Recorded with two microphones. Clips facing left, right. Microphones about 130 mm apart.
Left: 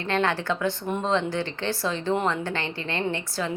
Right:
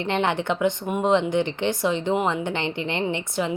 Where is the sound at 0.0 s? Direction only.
20° right (ahead or behind).